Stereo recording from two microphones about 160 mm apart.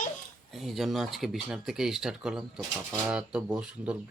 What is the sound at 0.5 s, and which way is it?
Speech, centre (ahead or behind).